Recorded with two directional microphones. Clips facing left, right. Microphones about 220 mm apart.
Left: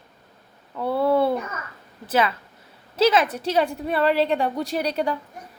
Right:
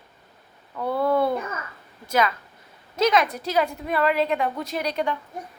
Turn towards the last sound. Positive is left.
turn(degrees=35)  # may be behind; listen again after turning